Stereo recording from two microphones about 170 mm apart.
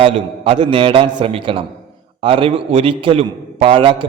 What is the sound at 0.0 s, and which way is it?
A man's voice, 30° right (ahead or behind).